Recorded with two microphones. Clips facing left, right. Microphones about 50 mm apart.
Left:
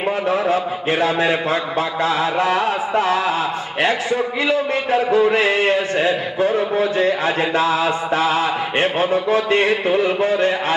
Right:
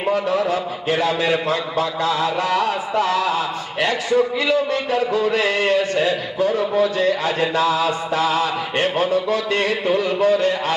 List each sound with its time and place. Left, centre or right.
0.1 s a man's voice: left